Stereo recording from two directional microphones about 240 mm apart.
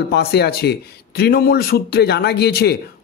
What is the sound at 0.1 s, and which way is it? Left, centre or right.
A man's voice, left.